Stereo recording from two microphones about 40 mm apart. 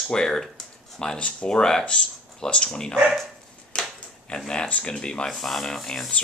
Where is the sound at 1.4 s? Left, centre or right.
Centre.